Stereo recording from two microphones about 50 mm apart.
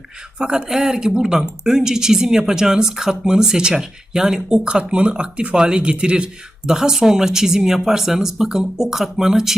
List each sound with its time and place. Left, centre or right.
0.3 s speech: centre